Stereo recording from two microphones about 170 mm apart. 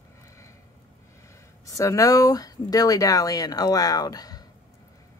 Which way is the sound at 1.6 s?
20° left (ahead or behind).